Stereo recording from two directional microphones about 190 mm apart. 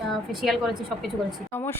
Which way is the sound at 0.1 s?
Centre (ahead or behind).